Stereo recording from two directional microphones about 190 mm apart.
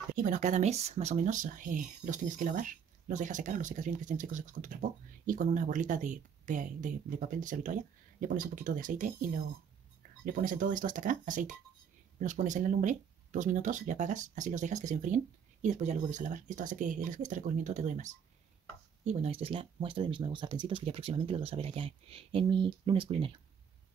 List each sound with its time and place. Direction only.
0.1 s speech: 45° right (ahead or behind); by 23.4 s 25° right (ahead or behind)